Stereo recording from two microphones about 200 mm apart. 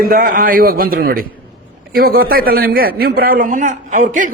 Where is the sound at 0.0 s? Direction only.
45° right (ahead or behind).